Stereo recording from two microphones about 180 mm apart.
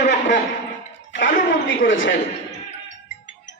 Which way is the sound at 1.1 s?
90° left.